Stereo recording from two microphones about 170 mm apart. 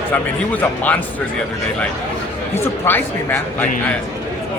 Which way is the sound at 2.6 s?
15° left (ahead or behind).